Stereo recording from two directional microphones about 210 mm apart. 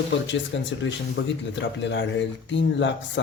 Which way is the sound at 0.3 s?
60° left (ahead or behind).